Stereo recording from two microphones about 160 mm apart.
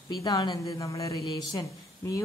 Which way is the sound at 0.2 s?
25° left (ahead or behind).